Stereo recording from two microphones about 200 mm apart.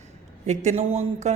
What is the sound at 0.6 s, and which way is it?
Speech, 35° right (ahead or behind).